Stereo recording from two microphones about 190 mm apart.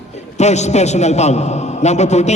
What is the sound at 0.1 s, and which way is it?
A man's voice, 35° left (ahead or behind).